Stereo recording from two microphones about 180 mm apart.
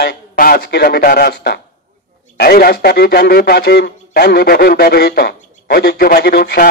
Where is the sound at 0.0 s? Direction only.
60° left (ahead or behind).